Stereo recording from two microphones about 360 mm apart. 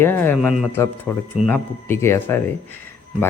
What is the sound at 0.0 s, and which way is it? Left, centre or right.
A man's voice, centre.